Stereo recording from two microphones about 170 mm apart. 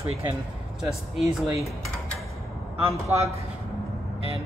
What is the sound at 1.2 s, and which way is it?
Speech, 20° right (ahead or behind).